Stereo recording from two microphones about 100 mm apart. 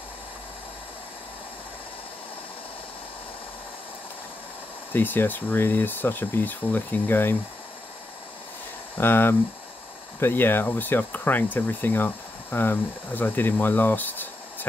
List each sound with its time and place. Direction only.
4.9 s speech: 20° left (ahead or behind)
8.9 s speech: 20° left (ahead or behind)